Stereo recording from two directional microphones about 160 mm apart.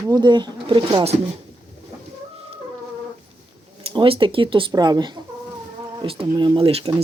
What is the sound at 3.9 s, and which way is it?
Speech, 35° right (ahead or behind).